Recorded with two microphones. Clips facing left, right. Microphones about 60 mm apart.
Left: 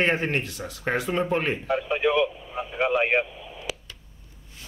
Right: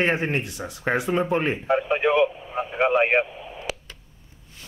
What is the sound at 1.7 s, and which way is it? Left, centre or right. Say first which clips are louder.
Speech: right 3 dB; right.